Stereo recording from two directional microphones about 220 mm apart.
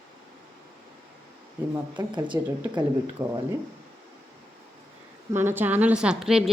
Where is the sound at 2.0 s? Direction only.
20° right (ahead or behind).